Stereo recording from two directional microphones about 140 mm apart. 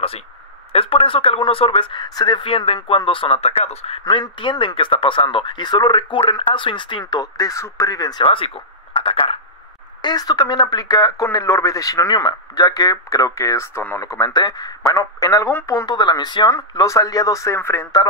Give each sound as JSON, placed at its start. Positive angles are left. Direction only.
{"t": 0.7, "sound": "speech", "side_deg": 40}
{"t": 4.0, "sound": "speech", "side_deg": 30}
{"t": 10.0, "sound": "speech", "side_deg": 30}